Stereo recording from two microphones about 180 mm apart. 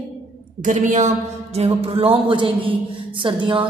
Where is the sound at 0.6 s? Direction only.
45° right (ahead or behind).